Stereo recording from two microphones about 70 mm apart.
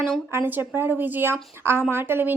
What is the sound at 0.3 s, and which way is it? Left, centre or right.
A woman's voice, right.